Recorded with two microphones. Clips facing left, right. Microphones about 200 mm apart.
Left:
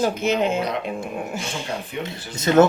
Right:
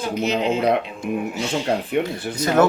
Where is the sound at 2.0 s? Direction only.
60° right (ahead or behind).